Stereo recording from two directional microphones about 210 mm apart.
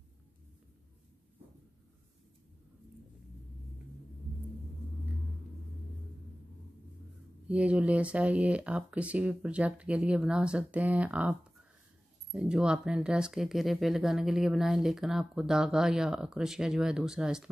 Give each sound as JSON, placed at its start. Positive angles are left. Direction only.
{"t": 7.4, "sound": "speech", "side_deg": -5}